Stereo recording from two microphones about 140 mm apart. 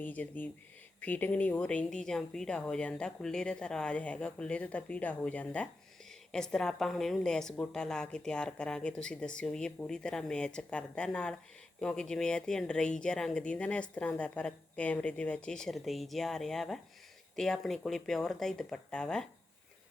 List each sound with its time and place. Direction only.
0.0 s a woman's voice: 10° left (ahead or behind)